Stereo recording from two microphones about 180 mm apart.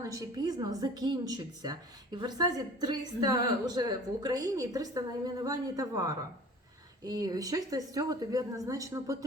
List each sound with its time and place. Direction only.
0.0 s a woman's voice: 20° right (ahead or behind)